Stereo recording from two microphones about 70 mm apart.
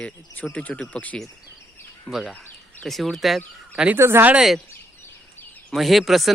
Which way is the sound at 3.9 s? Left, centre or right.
Right.